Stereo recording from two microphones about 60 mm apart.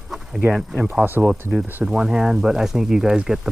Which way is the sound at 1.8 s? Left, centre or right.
Centre.